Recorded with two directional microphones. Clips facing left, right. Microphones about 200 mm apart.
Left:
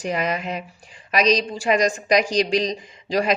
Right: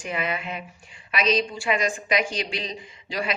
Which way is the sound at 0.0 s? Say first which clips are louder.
Left 5 dB; 40° left (ahead or behind).